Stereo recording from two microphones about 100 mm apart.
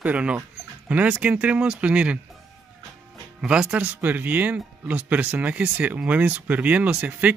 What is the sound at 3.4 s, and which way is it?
Speech, 5° right (ahead or behind).